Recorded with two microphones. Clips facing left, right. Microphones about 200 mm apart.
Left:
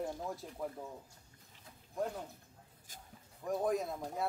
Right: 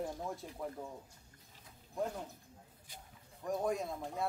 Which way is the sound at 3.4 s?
Centre (ahead or behind).